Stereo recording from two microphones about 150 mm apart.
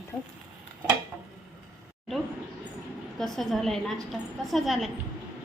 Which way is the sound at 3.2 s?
Centre (ahead or behind).